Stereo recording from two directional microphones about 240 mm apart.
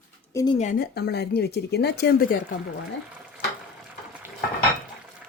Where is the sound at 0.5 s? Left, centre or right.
Left.